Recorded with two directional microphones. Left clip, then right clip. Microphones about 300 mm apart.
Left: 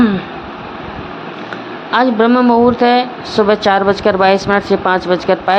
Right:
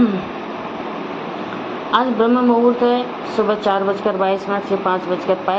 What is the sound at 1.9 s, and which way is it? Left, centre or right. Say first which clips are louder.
Speech: left 4 dB; left.